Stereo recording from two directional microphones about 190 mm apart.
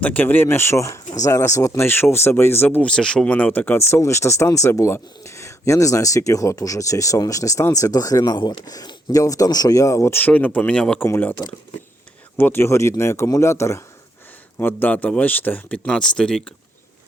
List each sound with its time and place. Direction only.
0.0 s speech: 10° left (ahead or behind)